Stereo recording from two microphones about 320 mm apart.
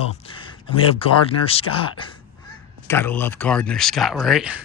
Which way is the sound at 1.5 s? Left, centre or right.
Centre.